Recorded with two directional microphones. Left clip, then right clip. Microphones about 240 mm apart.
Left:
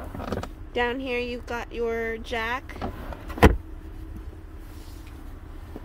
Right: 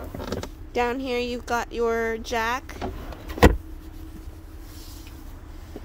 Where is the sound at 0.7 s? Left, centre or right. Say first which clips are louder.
Right 1 dB; centre.